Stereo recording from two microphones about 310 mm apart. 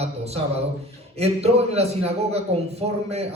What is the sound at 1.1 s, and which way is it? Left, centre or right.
A man's voice, centre.